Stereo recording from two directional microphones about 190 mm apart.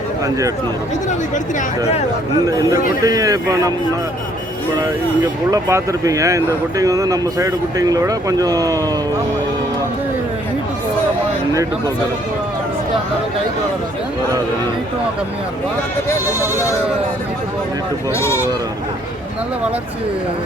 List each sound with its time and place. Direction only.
3.0 s speech: 20° right (ahead or behind)
4.8 s speech: 20° right (ahead or behind)
18.1 s speech: 15° left (ahead or behind)